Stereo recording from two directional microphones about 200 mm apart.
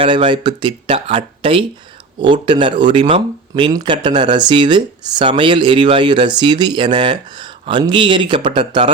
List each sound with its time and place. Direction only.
0.0 s speech: 25° right (ahead or behind)